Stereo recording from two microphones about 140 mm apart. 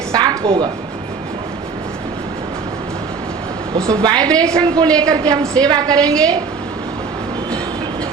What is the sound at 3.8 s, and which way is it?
Speech, 25° right (ahead or behind).